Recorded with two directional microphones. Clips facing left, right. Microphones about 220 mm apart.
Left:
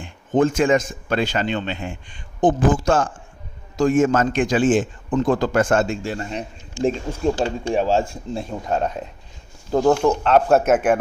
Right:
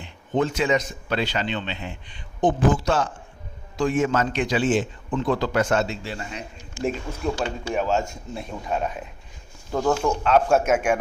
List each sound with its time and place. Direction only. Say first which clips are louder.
0.0 s a man's voice: left 5 dB; 50° left (ahead or behind)
6.8 s speech: left 5 dB; 30° left (ahead or behind)
9.7 s a man's voice: left 5 dB; 40° left (ahead or behind)